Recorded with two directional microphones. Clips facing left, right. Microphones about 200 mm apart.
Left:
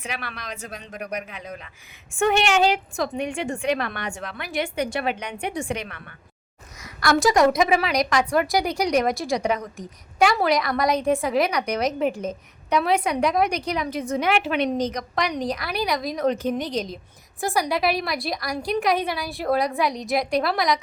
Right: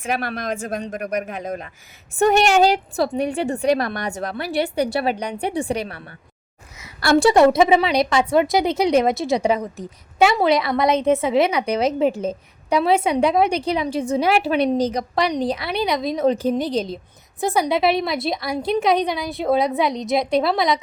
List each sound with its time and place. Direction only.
0.0 s a woman's voice: 45° right (ahead or behind); by 20.8 s 25° right (ahead or behind)